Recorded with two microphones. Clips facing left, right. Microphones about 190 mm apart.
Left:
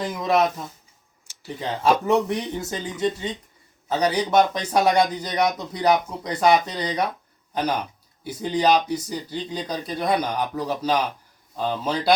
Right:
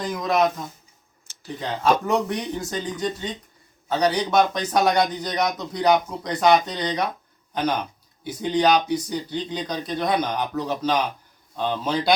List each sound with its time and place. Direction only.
0.0 s speech: 5° left (ahead or behind)
8.2 s speech: 5° left (ahead or behind)